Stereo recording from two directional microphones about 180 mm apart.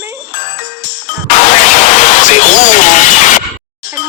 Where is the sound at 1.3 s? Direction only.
40° left (ahead or behind).